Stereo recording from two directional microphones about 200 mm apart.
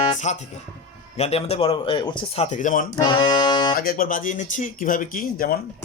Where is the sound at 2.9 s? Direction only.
20° left (ahead or behind).